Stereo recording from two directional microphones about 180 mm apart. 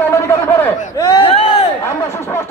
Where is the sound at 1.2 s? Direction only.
35° left (ahead or behind).